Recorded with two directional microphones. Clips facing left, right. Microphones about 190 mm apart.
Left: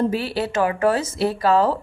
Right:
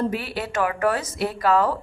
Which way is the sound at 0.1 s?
30° left (ahead or behind).